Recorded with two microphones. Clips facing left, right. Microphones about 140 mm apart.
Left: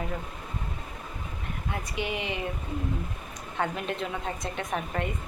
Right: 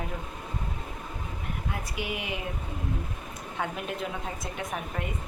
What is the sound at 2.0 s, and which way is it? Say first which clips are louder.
Speech: left 3 dB; 5° right (ahead or behind).